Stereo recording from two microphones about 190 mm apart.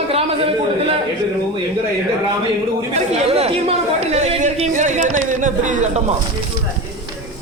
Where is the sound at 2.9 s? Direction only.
35° right (ahead or behind).